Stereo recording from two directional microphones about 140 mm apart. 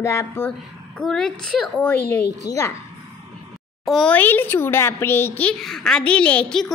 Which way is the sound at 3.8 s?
5° left (ahead or behind).